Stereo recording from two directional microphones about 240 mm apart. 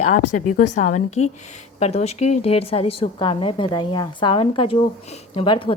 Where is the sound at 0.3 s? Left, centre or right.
Left.